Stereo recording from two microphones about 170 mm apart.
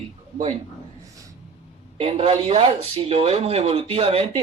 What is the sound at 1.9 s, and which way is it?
Speech, 35° right (ahead or behind).